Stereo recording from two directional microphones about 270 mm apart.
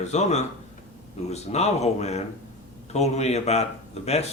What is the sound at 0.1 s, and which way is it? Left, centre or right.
A man's voice, left.